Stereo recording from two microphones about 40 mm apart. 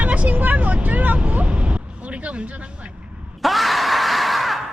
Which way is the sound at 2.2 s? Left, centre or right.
Right.